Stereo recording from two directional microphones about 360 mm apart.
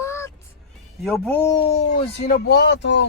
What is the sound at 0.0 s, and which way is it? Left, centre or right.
Music, centre.